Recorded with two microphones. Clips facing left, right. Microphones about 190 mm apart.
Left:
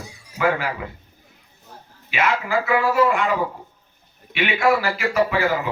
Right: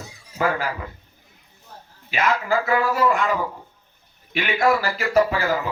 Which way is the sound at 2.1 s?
40° right (ahead or behind).